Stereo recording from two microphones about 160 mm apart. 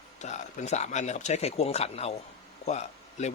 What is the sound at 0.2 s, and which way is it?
A man's voice, 45° left (ahead or behind).